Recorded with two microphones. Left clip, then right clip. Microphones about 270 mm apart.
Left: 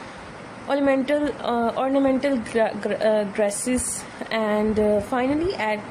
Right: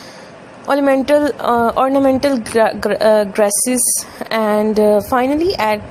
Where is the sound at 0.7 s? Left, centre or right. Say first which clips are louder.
Right 8 dB; centre.